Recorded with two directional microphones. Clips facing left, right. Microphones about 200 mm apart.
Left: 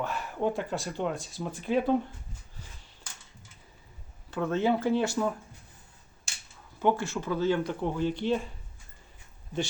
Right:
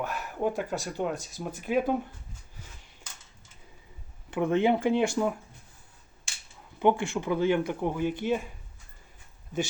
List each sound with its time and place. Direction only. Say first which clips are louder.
0.0 s speech: even; 10° right (ahead or behind)
4.3 s speech: right 3 dB; 15° right (ahead or behind)
6.7 s speech: right 2 dB; 15° right (ahead or behind)